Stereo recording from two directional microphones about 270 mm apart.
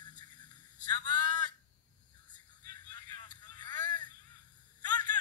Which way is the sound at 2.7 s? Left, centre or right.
Centre.